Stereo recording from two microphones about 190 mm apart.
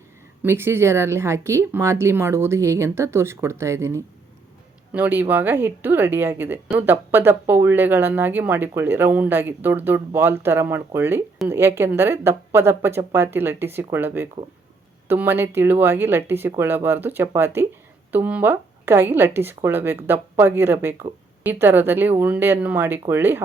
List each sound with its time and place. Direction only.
0.4 s speech: 10° right (ahead or behind)